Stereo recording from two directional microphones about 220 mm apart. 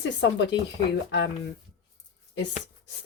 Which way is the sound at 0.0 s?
55° left (ahead or behind).